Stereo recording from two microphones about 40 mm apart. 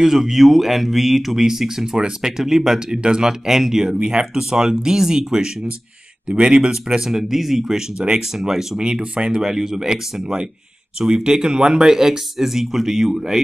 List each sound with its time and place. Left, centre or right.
0.0 s speech: centre
9.4 s speech: centre